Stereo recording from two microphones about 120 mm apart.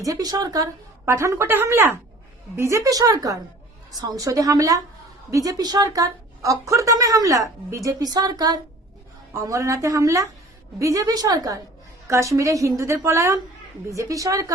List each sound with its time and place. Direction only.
0.0 s speech: 30° right (ahead or behind)